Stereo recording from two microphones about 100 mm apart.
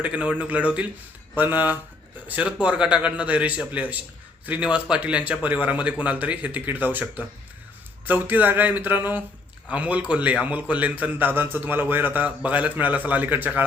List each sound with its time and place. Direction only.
0.0 s a man's voice: 10° right (ahead or behind)